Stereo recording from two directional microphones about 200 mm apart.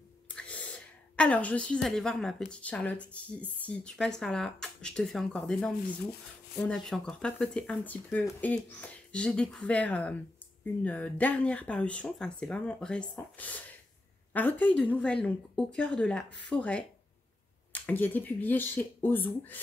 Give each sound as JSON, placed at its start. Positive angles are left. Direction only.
{"t": 0.4, "sound": "speech", "side_deg": 5}